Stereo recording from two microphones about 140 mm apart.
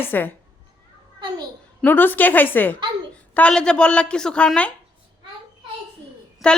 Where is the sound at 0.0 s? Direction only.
15° left (ahead or behind).